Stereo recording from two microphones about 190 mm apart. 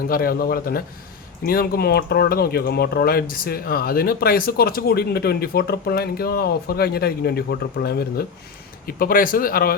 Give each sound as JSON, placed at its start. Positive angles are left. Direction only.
{"t": 0.1, "sound": "speech", "side_deg": 50}